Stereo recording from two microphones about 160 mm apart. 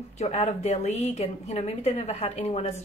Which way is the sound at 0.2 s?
40° left (ahead or behind).